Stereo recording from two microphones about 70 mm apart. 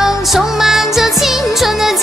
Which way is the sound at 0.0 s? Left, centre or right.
Centre.